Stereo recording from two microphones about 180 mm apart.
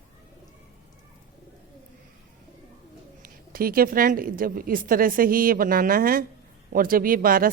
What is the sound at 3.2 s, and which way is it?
A woman's voice, 55° right (ahead or behind).